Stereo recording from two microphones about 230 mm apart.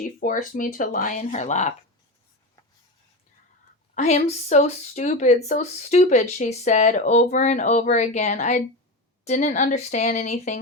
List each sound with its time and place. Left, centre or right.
0.0 s speech: left
3.9 s speech: left